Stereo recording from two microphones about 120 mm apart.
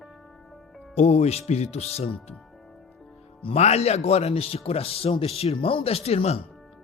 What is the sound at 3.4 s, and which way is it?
Speech, 60° left (ahead or behind).